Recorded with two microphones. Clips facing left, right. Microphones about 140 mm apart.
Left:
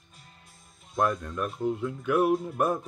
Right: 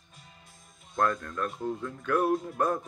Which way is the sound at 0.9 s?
15° left (ahead or behind).